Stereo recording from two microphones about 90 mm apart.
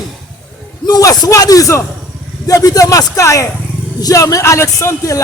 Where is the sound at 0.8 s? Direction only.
45° left (ahead or behind).